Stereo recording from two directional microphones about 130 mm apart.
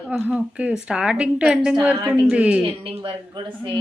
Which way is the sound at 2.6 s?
40° right (ahead or behind).